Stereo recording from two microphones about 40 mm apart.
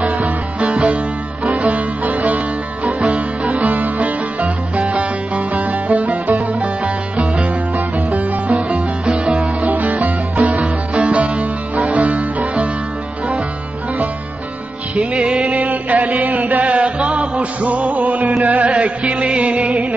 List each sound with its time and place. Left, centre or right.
0.0 s music: right
9.7 s music: right
15.0 s music: right